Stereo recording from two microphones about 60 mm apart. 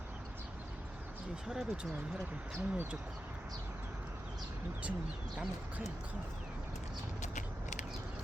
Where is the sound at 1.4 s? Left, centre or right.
Centre.